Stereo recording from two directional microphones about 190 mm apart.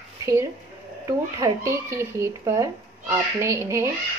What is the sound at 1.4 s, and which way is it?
Speech, 15° right (ahead or behind).